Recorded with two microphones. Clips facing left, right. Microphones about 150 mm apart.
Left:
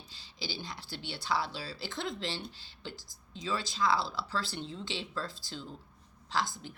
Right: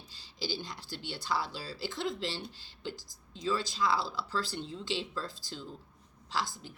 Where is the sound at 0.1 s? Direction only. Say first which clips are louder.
Right 4 dB; 45° right (ahead or behind).